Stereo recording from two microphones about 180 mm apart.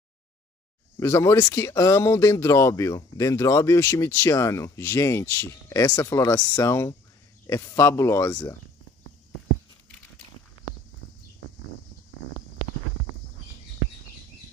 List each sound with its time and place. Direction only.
0.9 s speech: 15° left (ahead or behind)